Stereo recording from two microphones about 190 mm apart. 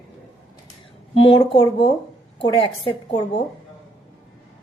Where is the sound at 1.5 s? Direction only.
30° left (ahead or behind).